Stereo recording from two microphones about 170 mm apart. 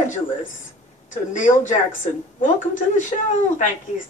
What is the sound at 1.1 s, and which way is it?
Speech, 50° left (ahead or behind).